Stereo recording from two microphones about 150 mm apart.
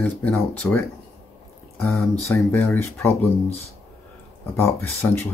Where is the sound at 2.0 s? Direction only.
5° left (ahead or behind).